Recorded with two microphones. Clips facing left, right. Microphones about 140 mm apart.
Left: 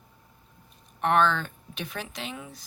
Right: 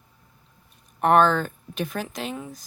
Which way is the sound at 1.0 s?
45° right (ahead or behind).